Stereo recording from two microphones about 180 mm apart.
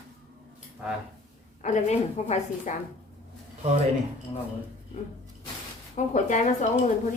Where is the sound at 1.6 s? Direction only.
40° left (ahead or behind).